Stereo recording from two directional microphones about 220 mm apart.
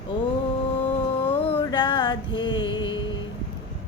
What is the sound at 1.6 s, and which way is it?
Music, 20° left (ahead or behind).